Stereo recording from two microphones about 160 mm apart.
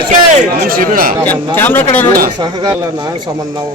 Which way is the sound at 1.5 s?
15° left (ahead or behind).